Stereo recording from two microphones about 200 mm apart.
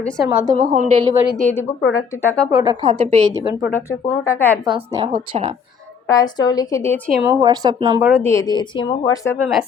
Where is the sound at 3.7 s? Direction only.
15° left (ahead or behind).